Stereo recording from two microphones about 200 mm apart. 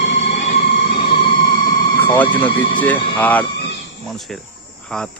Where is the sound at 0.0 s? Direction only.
35° left (ahead or behind).